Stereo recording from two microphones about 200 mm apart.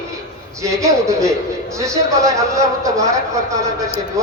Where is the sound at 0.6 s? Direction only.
15° right (ahead or behind).